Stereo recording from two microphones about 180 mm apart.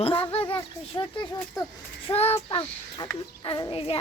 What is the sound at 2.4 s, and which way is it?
Speech, 25° left (ahead or behind).